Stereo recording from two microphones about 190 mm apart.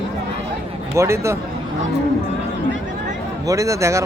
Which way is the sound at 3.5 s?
15° right (ahead or behind).